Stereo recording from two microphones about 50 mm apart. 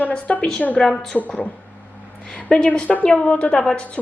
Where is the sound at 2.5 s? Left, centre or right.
Centre.